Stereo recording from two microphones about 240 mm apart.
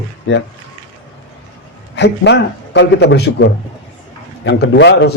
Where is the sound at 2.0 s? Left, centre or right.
Left.